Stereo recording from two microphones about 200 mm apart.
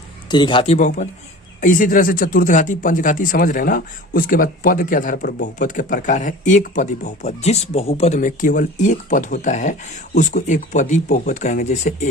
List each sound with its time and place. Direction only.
0.3 s speech: 20° left (ahead or behind)